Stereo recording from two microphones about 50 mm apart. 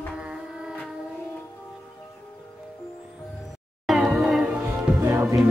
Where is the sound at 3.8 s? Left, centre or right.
Centre.